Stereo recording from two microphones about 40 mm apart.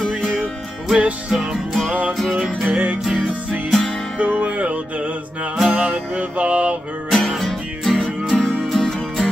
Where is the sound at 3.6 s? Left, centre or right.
Centre.